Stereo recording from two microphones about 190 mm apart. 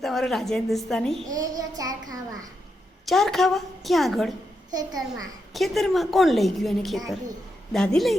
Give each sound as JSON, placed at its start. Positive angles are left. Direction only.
{"t": 0.0, "sound": "a woman's voice", "side_deg": 0}
{"t": 1.3, "sound": "a child's voice", "side_deg": -20}
{"t": 3.1, "sound": "a woman's voice", "side_deg": 0}
{"t": 4.7, "sound": "a child's voice", "side_deg": -20}
{"t": 5.5, "sound": "a woman's voice", "side_deg": 0}